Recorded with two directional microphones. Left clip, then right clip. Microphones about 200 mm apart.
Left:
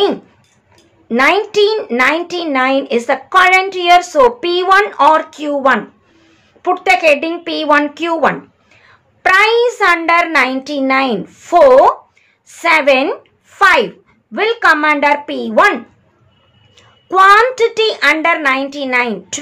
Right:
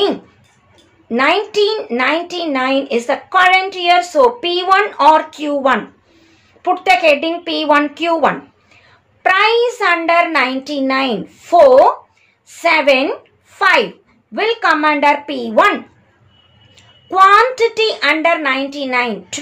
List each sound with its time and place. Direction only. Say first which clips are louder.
1.0 s a woman's voice: left 2 dB; 20° left (ahead or behind)